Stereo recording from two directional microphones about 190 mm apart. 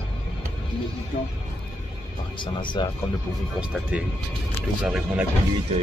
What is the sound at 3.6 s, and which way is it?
Speech, 5° right (ahead or behind).